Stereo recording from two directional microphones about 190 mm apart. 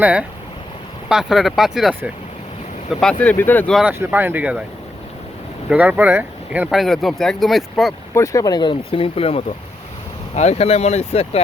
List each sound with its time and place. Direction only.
0.0 s speech: 5° right (ahead or behind); by 3.8 s 10° left (ahead or behind)
3.8 s speech: 10° right (ahead or behind)
5.6 s speech: 5° right (ahead or behind)
8.1 s speech: 15° left (ahead or behind); by 11.3 s 35° left (ahead or behind)